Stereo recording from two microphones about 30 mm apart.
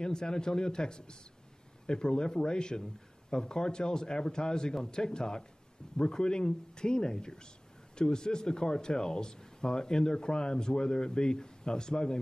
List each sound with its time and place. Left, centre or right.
0.0 s speech: left